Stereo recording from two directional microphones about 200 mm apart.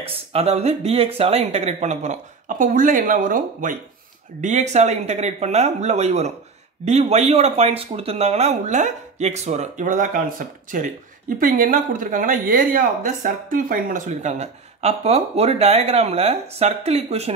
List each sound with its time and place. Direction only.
0.0 s speech: 30° right (ahead or behind)